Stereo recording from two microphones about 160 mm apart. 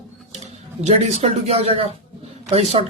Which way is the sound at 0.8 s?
45° right (ahead or behind).